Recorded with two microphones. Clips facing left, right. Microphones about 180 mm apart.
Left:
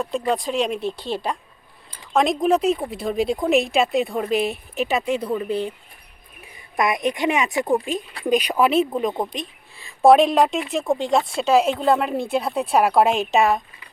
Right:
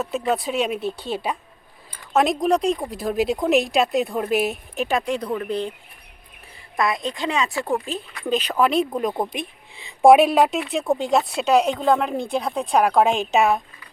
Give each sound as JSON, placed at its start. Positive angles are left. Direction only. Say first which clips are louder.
{"t": 0.0, "sound": "speech", "louder": "even", "side_deg": -5}
{"t": 6.7, "sound": "speech", "louder": "left 2 dB", "side_deg": 20}